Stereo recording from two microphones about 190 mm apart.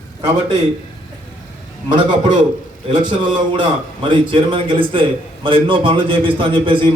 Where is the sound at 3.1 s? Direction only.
25° right (ahead or behind).